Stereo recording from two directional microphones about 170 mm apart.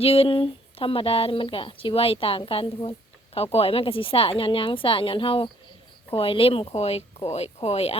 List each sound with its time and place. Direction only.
0.0 s speech: 35° left (ahead or behind)